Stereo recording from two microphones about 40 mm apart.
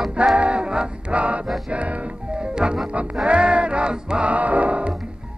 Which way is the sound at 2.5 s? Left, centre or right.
Right.